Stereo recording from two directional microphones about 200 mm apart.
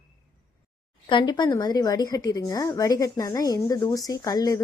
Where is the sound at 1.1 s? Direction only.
20° left (ahead or behind).